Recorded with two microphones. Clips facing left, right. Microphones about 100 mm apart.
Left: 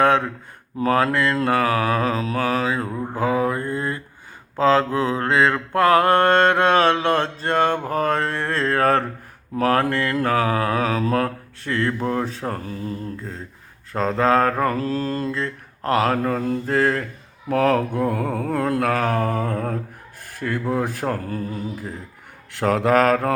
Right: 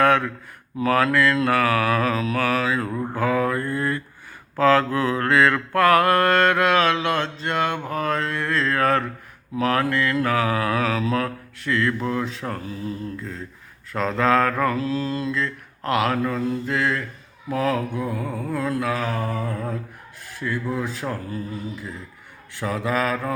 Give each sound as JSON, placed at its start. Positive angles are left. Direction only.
{"t": 0.0, "sound": "a sound", "side_deg": 25}
{"t": 0.8, "sound": "mantra", "side_deg": 35}
{"t": 3.2, "sound": "a sound", "side_deg": 25}
{"t": 4.5, "sound": "mantra", "side_deg": 25}
{"t": 17.5, "sound": "mantra", "side_deg": 55}
{"t": 22.5, "sound": "mantra", "side_deg": 70}